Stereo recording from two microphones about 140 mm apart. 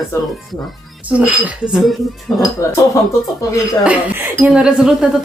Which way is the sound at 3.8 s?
10° right (ahead or behind).